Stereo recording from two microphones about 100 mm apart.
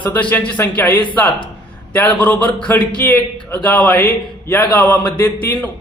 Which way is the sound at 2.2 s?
15° left (ahead or behind).